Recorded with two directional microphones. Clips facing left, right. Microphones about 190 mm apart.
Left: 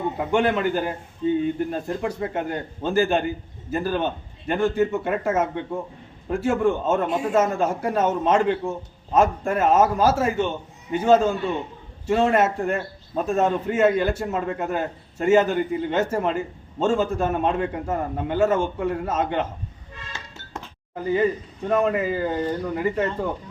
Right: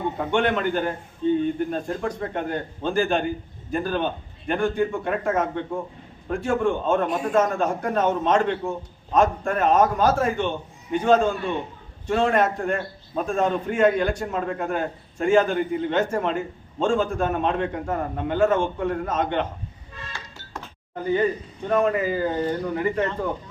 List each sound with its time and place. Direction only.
0.3 s a man's voice: 5° left (ahead or behind)
20.9 s a man's voice: 5° left (ahead or behind)